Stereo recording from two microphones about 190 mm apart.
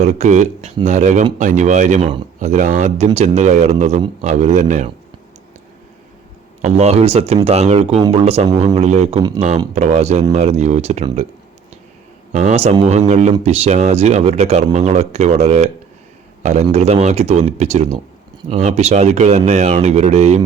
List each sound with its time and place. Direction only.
0.0 s speech: 40° right (ahead or behind)
6.6 s speech: 35° right (ahead or behind)
12.3 s a man's voice: 40° right (ahead or behind)